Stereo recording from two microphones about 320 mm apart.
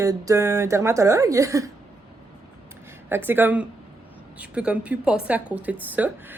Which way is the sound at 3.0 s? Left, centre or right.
Centre.